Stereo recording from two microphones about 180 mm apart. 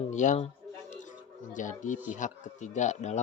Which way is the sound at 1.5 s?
45° left (ahead or behind).